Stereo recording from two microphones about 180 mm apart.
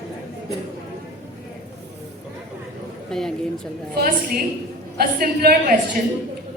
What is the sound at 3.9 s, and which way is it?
A woman's voice, 55° right (ahead or behind).